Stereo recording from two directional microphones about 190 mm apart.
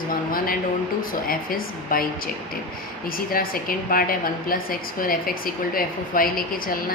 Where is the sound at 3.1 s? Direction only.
50° left (ahead or behind).